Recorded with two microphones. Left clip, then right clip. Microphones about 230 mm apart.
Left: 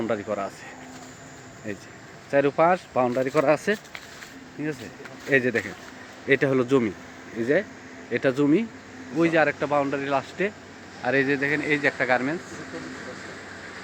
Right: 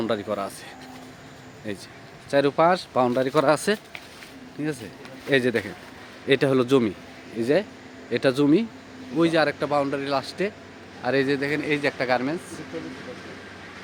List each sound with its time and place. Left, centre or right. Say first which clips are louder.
0.0 s speech: right 1 dB; centre
2.3 s speech: right 1 dB; centre
8.1 s speech: right 1 dB; centre